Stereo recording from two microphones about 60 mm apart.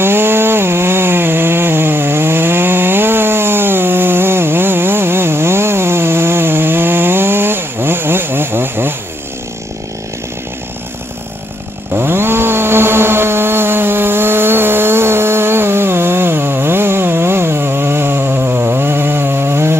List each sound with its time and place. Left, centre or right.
0.0 s chainsaw: right
11.9 s chainsaw: right